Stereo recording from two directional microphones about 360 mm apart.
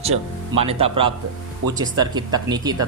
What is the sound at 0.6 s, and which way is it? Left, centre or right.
Speech, centre.